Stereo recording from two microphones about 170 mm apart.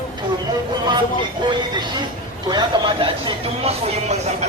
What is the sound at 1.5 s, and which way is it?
Speech, 25° right (ahead or behind).